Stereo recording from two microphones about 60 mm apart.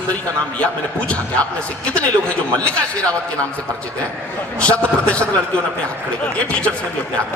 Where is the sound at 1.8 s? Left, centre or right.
Left.